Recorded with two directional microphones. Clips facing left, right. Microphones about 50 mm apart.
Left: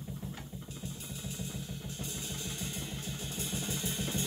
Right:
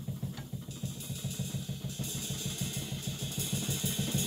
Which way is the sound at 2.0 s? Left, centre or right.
Left.